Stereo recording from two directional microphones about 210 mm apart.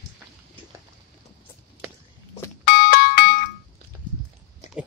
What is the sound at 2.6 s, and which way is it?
Doorbell, 45° left (ahead or behind).